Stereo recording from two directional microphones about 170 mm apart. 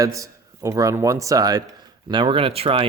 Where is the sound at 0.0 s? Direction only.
20° right (ahead or behind).